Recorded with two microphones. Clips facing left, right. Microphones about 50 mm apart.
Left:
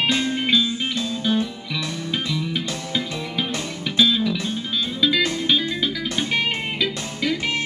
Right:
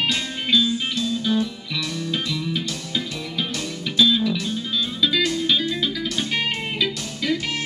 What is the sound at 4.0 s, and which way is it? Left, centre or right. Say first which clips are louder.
Music: even; centre.